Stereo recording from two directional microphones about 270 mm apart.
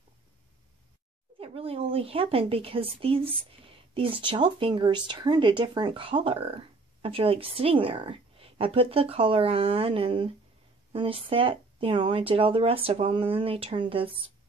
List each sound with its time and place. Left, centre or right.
1.4 s a woman's voice: right